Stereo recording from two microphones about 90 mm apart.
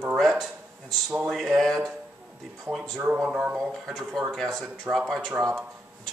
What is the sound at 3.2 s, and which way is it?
Speech, 15° right (ahead or behind).